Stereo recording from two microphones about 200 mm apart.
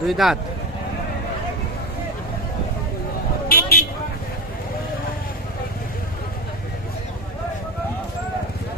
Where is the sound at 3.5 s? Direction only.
45° left (ahead or behind).